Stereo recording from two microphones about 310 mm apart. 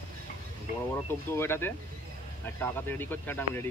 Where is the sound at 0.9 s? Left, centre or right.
Centre.